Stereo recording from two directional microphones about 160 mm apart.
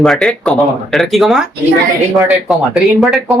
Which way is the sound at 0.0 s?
Centre (ahead or behind).